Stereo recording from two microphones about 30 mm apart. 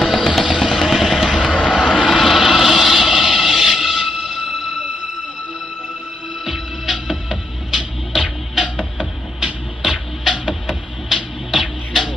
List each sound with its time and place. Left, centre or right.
0.0 s music: centre
0.6 s vehicle: centre
1.3 s vehicle: left
2.0 s a sound: centre
6.4 s music: centre
9.4 s music: centre
11.5 s music: centre